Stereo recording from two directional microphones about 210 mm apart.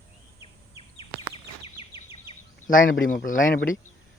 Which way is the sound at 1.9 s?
10° right (ahead or behind).